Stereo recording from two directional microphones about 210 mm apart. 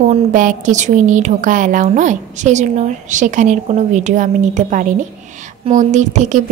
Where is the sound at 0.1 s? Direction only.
40° right (ahead or behind).